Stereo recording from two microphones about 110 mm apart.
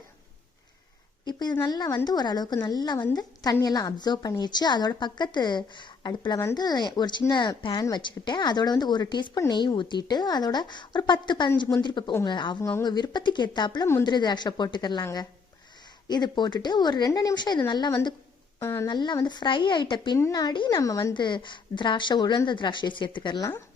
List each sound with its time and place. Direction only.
1.2 s a sound: 40° left (ahead or behind)
1.6 s a woman's voice: 40° left (ahead or behind)
12.5 s speech: 20° left (ahead or behind)
12.8 s a woman's voice: 40° left (ahead or behind)
18.6 s speech: 25° left (ahead or behind)
18.9 s a woman's voice: 40° left (ahead or behind)
20.7 s a woman's voice: 30° left (ahead or behind)
21.1 s a woman's voice: 45° left (ahead or behind)
23.4 s speech: 30° left (ahead or behind)